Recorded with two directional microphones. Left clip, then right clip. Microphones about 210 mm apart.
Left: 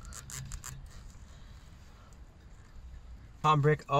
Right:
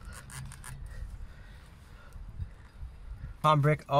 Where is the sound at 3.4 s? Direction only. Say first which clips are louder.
Right 1 dB; 10° right (ahead or behind).